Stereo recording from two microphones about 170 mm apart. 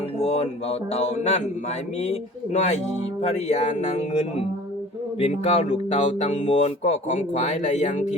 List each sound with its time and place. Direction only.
0.2 s speech: 40° left (ahead or behind)